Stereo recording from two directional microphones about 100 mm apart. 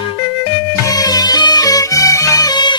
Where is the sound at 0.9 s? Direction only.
40° left (ahead or behind).